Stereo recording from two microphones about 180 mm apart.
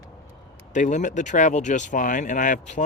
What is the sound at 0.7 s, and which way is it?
Speech, 45° left (ahead or behind).